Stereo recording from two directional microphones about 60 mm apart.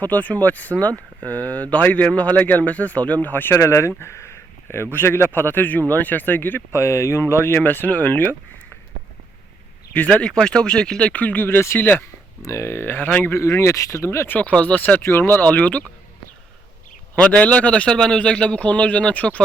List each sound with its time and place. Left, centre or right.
0.0 s a man's voice: left
3.5 s speech: left
6.7 s speech: left
10.2 s speech: centre
11.1 s speech: left
12.4 s speech: left
12.6 s speech: left
13.4 s speech: left
14.3 s a man's voice: left
14.8 s a man's voice: left
17.2 s a man's voice: left